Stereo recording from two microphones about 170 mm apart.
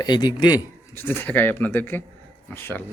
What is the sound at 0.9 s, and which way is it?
Speech, 15° left (ahead or behind).